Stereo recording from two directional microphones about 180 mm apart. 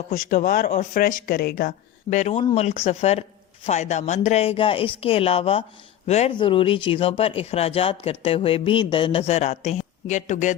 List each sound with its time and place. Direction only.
0.1 s speech: 50° left (ahead or behind)
2.0 s speech: 40° left (ahead or behind)